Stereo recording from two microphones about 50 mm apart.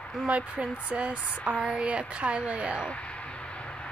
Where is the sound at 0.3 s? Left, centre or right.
Right.